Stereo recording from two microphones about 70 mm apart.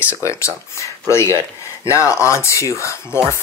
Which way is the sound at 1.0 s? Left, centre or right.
Left.